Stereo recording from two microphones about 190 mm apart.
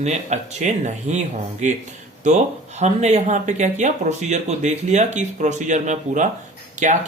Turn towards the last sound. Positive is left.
turn(degrees=-40)  # may be behind; listen again after turning